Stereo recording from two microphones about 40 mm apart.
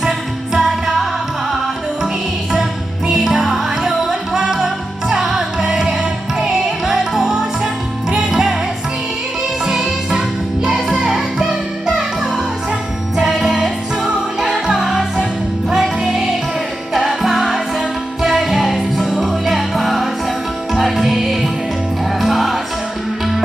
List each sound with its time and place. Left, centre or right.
0.0 s music: centre
3.1 s music: centre
9.6 s music: centre
16.0 s music: centre